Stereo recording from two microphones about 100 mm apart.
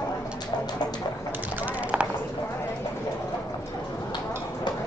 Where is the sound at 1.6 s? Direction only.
15° right (ahead or behind).